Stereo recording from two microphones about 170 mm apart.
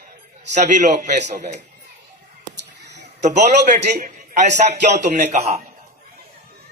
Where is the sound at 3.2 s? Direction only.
45° right (ahead or behind).